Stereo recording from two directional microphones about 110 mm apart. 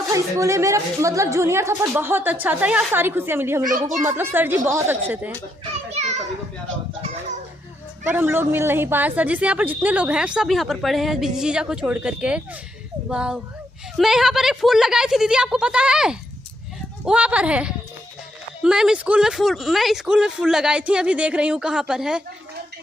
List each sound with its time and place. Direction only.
0.1 s a woman's voice: 30° right (ahead or behind)
3.6 s a child's voice: 35° right (ahead or behind)
4.0 s a woman's voice: 20° right (ahead or behind)
5.9 s children playing: 90° right
8.1 s a woman's voice: 20° right (ahead or behind)